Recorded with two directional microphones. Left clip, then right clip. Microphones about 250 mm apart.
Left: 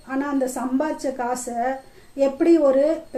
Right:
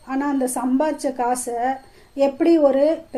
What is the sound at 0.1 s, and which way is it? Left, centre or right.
A woman's voice, right.